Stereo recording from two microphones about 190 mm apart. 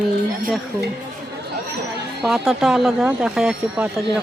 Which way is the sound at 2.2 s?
Centre (ahead or behind).